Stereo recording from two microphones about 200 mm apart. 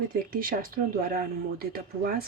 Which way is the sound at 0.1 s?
45° right (ahead or behind).